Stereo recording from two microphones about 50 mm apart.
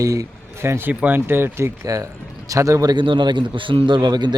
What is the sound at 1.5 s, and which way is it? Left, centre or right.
Speech, right.